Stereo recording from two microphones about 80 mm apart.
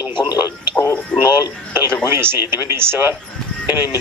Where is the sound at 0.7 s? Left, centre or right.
Left.